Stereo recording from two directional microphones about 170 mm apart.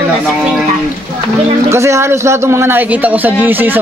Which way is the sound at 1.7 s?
15° right (ahead or behind).